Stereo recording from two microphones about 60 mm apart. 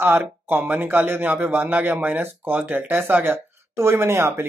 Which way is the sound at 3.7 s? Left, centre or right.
Right.